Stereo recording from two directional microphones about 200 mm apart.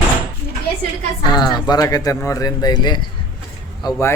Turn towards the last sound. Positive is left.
turn(degrees=15)  # may be behind; listen again after turning